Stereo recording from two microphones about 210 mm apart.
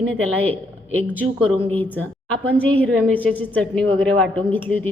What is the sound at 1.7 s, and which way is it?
A woman's voice, 5° left (ahead or behind).